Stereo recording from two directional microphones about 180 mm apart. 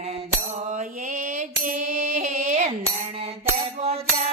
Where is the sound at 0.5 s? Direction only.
45° right (ahead or behind).